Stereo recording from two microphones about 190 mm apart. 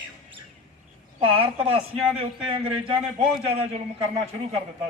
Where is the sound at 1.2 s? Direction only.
30° right (ahead or behind).